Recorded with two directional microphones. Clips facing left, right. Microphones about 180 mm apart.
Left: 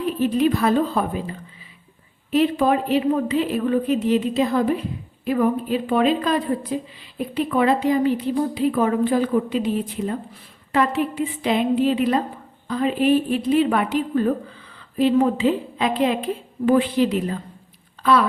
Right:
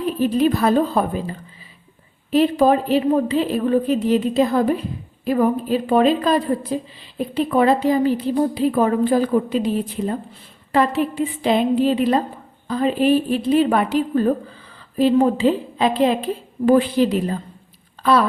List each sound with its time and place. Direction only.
0.0 s speech: 35° right (ahead or behind)
11.4 s speech: 35° right (ahead or behind)